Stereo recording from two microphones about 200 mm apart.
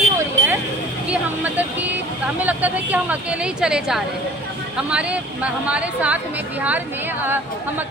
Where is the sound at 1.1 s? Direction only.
10° right (ahead or behind).